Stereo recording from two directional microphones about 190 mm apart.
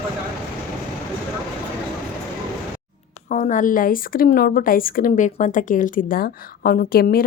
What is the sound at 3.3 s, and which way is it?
A woman's voice, 40° left (ahead or behind).